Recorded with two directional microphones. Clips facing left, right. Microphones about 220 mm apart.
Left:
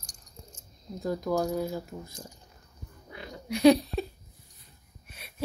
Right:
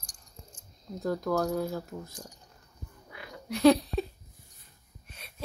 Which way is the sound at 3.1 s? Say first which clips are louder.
Left 4 dB; 25° left (ahead or behind).